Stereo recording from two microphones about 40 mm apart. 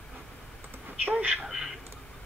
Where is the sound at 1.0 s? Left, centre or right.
Right.